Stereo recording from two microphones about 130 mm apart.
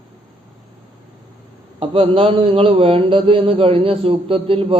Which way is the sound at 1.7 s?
45° right (ahead or behind).